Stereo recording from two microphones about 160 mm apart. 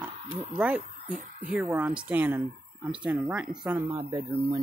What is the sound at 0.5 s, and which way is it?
Speech, 10° right (ahead or behind).